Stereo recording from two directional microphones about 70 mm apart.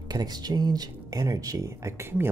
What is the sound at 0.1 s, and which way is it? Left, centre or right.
Speech, right.